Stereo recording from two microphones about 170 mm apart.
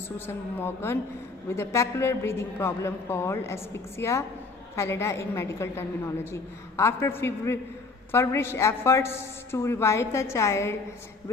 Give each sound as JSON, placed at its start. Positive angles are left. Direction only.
{"t": 0.6, "sound": "a woman's voice", "side_deg": 15}